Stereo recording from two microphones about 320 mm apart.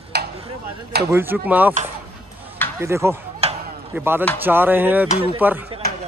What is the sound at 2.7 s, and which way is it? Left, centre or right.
Speech, centre.